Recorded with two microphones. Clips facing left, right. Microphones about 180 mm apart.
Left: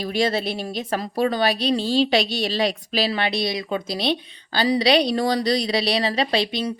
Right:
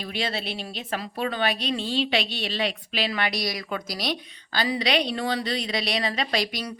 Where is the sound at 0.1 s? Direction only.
40° left (ahead or behind).